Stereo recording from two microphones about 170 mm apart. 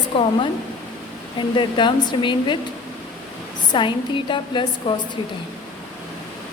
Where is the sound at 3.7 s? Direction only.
30° left (ahead or behind).